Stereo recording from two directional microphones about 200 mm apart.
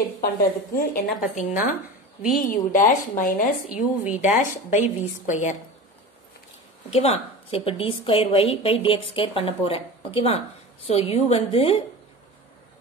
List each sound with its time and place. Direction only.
0.7 s a woman's voice: 40° left (ahead or behind)
6.9 s a woman's voice: 30° left (ahead or behind)